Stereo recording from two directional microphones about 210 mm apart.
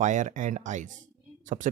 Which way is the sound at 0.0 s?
35° right (ahead or behind).